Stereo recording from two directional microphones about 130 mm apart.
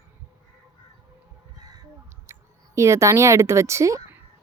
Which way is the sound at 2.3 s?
20° right (ahead or behind).